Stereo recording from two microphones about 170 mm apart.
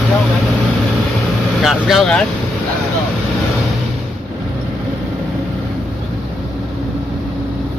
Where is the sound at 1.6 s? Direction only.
Centre (ahead or behind).